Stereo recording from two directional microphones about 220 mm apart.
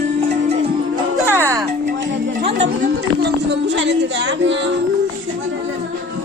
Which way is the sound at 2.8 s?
50° right (ahead or behind).